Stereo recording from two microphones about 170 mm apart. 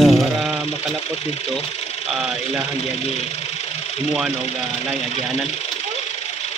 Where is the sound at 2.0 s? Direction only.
5° right (ahead or behind).